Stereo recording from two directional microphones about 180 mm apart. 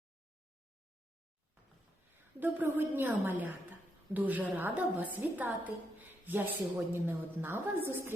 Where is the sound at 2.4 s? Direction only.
10° right (ahead or behind).